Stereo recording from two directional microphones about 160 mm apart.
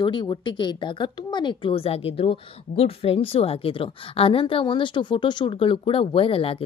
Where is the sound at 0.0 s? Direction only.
30° left (ahead or behind).